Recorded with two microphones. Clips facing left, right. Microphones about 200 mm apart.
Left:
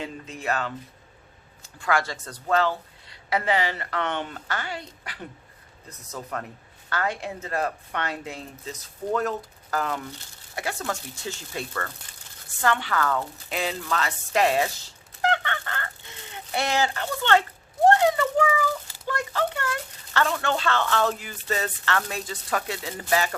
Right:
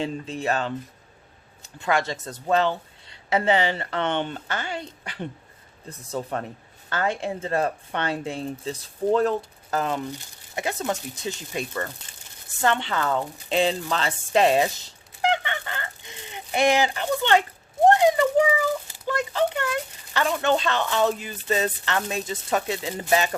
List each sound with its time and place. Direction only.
0.0 s speech: 30° right (ahead or behind)
1.8 s speech: 20° right (ahead or behind)
15.2 s a sound: 15° right (ahead or behind)
17.8 s a child's voice: 15° right (ahead or behind)